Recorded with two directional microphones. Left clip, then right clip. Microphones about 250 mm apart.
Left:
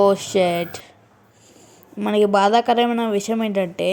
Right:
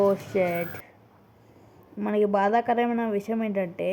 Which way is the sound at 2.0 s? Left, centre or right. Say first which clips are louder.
Left 7 dB; left.